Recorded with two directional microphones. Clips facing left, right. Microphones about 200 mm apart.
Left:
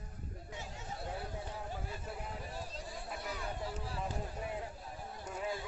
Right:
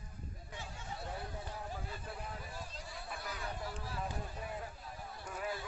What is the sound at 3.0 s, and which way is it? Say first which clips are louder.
Chatter: left 1 dB; 25° left (ahead or behind).